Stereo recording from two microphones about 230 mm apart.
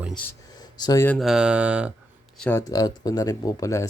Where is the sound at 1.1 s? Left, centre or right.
Centre.